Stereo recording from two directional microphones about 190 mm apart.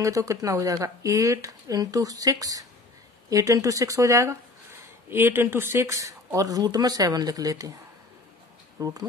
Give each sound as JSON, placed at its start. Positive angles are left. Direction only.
{"t": 0.0, "sound": "speech", "side_deg": -15}